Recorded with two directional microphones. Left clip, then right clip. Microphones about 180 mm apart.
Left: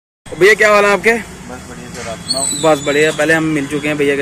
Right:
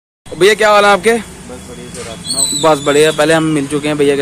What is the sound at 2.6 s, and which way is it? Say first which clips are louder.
Speech: right 3 dB; 20° right (ahead or behind).